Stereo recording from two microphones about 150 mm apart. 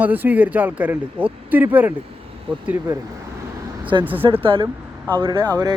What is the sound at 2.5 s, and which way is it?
Speech, 35° right (ahead or behind).